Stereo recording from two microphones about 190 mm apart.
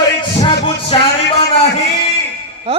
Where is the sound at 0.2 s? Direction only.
25° left (ahead or behind).